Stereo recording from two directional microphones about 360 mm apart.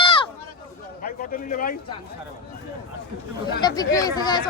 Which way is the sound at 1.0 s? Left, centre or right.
Left.